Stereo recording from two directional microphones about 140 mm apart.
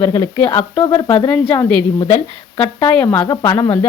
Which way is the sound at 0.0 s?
25° left (ahead or behind).